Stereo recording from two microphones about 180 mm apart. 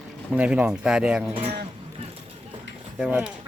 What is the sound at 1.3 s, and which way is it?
Speech, 35° right (ahead or behind).